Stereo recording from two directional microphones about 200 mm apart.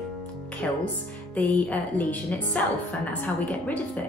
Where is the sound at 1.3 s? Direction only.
10° left (ahead or behind).